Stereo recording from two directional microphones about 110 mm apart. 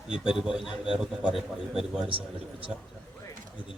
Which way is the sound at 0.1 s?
5° right (ahead or behind).